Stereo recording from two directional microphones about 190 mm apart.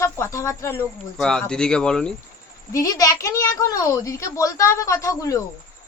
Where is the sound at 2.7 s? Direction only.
20° left (ahead or behind).